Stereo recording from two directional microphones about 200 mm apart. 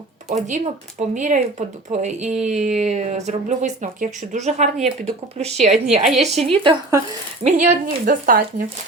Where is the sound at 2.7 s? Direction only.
35° right (ahead or behind).